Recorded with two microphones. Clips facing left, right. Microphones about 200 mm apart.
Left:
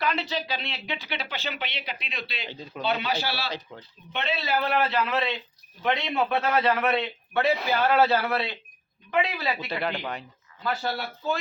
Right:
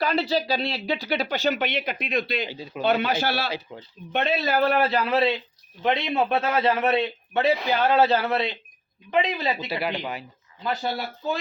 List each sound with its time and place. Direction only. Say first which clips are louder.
0.0 s speech: right 5 dB; 35° right (ahead or behind)
2.5 s speech: right 3 dB; 10° right (ahead or behind)
3.0 s speech: right 5 dB; 50° right (ahead or behind)
3.7 s speech: right 3 dB; 10° right (ahead or behind)
4.1 s a man's voice: right 5 dB; 45° right (ahead or behind); by 9.6 s 20° right (ahead or behind)
9.6 s speech: right 2 dB; 5° right (ahead or behind)